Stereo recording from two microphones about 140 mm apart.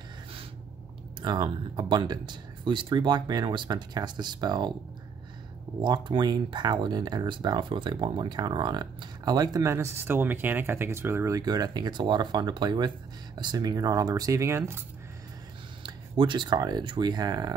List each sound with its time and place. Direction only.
1.2 s speech: 30° right (ahead or behind)
5.8 s speech: 35° right (ahead or behind)
15.8 s speech: 35° right (ahead or behind)